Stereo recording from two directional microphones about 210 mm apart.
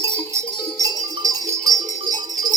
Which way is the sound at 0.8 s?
20° right (ahead or behind).